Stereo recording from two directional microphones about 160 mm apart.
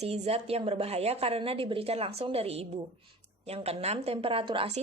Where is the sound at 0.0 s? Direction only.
40° right (ahead or behind).